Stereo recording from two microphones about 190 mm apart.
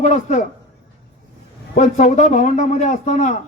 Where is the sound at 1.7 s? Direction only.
35° left (ahead or behind).